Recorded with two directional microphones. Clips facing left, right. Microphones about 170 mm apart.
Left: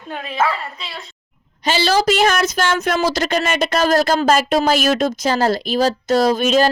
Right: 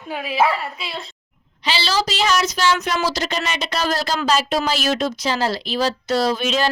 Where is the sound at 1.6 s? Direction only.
50° left (ahead or behind).